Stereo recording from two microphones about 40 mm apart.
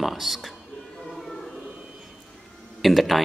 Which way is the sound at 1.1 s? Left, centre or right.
Centre.